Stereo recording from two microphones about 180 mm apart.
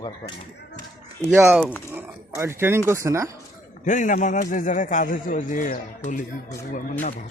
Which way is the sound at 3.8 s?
45° left (ahead or behind).